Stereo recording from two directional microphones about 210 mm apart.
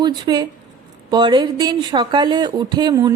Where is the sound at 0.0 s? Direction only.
20° right (ahead or behind).